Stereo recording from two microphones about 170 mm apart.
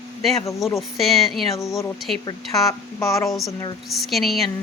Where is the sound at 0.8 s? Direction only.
Centre (ahead or behind).